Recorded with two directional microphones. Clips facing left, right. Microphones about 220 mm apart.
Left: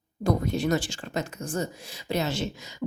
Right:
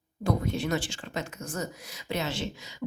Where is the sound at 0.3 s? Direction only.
40° left (ahead or behind).